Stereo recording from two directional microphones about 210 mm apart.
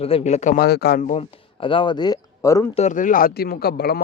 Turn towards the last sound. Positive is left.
turn(degrees=50)  # may be behind; listen again after turning